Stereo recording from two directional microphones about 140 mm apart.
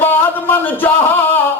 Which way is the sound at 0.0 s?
15° left (ahead or behind).